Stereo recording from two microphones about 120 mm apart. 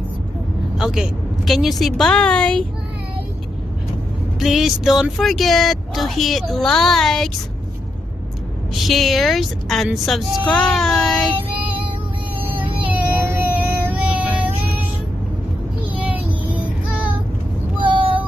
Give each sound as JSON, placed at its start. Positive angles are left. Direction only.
{"t": 0.7, "sound": "speech", "side_deg": -5}
{"t": 4.4, "sound": "speech", "side_deg": 0}
{"t": 8.8, "sound": "speech", "side_deg": 0}
{"t": 12.8, "sound": "a sound", "side_deg": -15}
{"t": 15.9, "sound": "a sound", "side_deg": -15}
{"t": 17.7, "sound": "child singing", "side_deg": -45}